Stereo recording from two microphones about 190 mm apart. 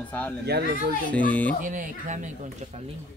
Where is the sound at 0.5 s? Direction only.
60° right (ahead or behind).